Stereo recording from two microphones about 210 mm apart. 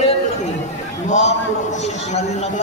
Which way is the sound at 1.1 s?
35° left (ahead or behind).